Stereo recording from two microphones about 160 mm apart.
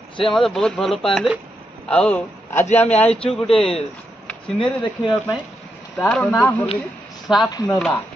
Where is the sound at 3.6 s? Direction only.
35° left (ahead or behind).